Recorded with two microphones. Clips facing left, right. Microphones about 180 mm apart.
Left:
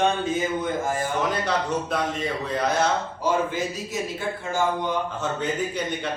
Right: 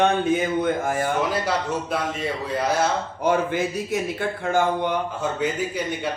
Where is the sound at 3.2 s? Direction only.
60° right (ahead or behind).